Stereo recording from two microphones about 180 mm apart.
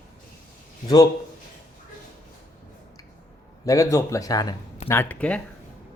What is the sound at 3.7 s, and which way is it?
A man's voice, 15° left (ahead or behind).